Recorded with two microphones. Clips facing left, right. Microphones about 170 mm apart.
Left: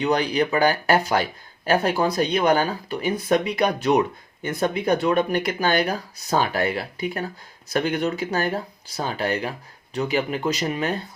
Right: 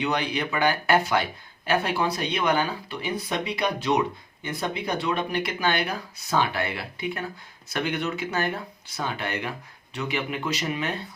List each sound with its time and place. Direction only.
0.0 s speech: 40° left (ahead or behind)